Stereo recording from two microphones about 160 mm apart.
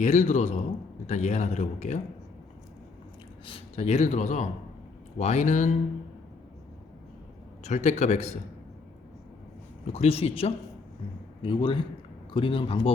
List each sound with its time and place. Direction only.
0.0 s speech: 45° left (ahead or behind)
3.4 s speech: 40° left (ahead or behind)
7.6 s speech: 45° left (ahead or behind)
9.9 s speech: 40° left (ahead or behind)